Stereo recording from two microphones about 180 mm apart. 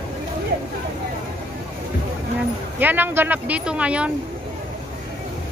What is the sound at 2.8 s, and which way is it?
Speech, 10° right (ahead or behind).